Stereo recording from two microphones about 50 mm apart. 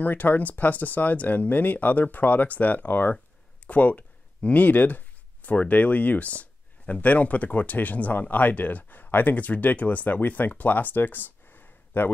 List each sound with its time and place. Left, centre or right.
0.0 s speech: left